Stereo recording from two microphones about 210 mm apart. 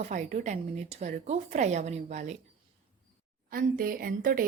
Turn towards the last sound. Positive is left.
turn(degrees=-40)  # may be behind; listen again after turning